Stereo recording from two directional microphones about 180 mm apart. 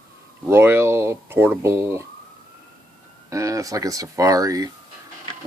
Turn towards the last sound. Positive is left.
turn(degrees=-20)  # may be behind; listen again after turning